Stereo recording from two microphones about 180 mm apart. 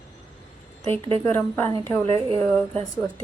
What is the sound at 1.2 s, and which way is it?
A woman's voice, 10° left (ahead or behind).